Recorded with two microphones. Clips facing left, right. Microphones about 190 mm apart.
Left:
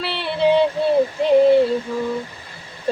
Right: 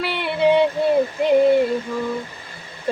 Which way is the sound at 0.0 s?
30° left (ahead or behind).